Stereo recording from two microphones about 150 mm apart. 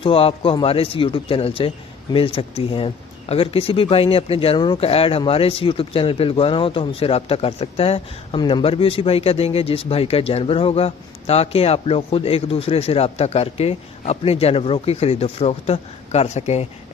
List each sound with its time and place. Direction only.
0.0 s speech: 40° left (ahead or behind)
8.4 s speech: 30° left (ahead or behind); by 16.6 s 45° left (ahead or behind)